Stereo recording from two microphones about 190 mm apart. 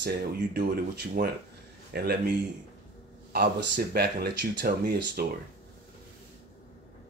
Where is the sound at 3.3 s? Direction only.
55° right (ahead or behind).